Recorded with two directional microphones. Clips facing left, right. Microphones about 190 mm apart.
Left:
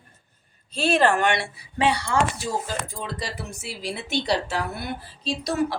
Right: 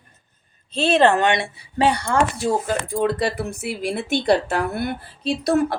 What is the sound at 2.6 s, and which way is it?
Speech, 60° right (ahead or behind).